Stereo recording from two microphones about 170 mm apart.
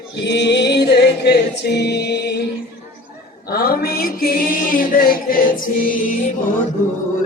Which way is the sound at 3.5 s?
65° left (ahead or behind).